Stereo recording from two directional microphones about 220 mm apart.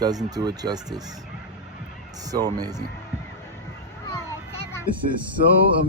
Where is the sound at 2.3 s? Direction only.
15° right (ahead or behind).